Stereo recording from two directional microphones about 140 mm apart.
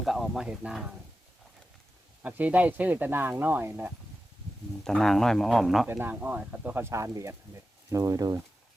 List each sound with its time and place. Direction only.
0.0 s speech: centre (ahead or behind)
2.2 s speech: 10° right (ahead or behind)
4.8 s speech: 5° left (ahead or behind)
5.9 s speech: 15° right (ahead or behind)